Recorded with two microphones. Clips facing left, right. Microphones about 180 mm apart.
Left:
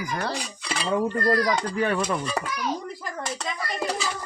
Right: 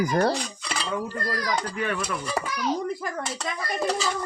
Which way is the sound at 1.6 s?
35° left (ahead or behind).